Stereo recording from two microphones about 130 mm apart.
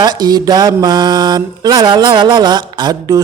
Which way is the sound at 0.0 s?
35° right (ahead or behind).